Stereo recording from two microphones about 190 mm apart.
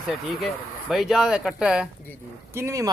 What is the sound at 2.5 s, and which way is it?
Speech, 15° right (ahead or behind).